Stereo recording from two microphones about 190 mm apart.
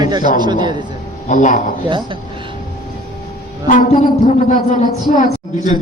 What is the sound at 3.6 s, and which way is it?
A woman's voice, 45° left (ahead or behind).